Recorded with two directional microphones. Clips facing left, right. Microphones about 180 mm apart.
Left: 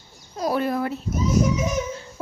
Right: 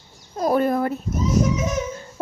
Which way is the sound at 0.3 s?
50° right (ahead or behind).